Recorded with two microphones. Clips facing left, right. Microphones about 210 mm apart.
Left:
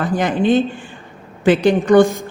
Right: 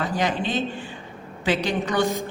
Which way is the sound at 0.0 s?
50° left (ahead or behind).